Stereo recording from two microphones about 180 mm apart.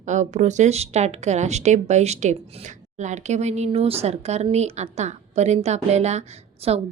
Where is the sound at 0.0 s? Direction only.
40° right (ahead or behind).